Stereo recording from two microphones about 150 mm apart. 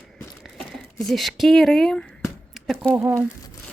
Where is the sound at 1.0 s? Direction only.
Centre (ahead or behind).